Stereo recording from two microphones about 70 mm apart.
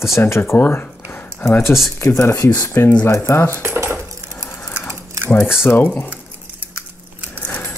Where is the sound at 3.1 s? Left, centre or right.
Left.